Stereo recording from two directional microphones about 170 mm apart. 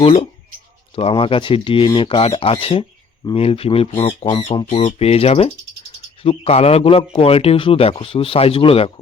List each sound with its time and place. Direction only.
0.0 s a man's voice: 35° left (ahead or behind)